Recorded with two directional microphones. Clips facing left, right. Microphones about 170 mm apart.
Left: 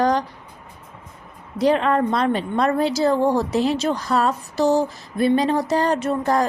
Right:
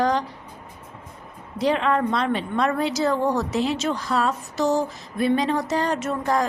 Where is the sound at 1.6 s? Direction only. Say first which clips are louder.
Left 3 dB; 40° left (ahead or behind).